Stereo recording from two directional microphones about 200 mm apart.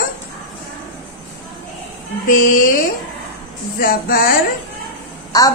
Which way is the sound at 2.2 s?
40° left (ahead or behind).